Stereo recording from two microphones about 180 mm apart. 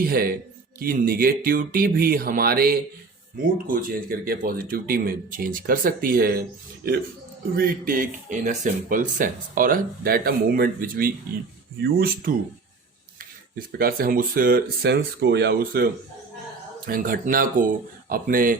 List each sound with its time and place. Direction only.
0.0 s speech: 55° right (ahead or behind)
7.5 s speech: 55° right (ahead or behind)
13.7 s speech: 55° right (ahead or behind)
14.8 s speech: 65° right (ahead or behind); by 18.5 s 50° right (ahead or behind)